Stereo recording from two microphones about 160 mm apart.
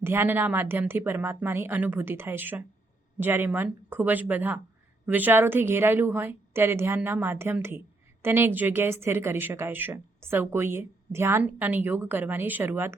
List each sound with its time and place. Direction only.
0.0 s a woman's voice: 15° right (ahead or behind)